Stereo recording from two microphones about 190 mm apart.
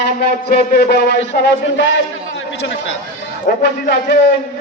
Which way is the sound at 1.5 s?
65° left (ahead or behind).